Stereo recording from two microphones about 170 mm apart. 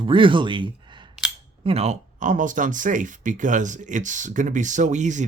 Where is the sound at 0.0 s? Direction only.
30° right (ahead or behind).